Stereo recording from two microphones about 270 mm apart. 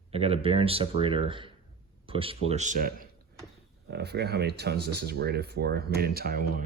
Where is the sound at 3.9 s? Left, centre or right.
Right.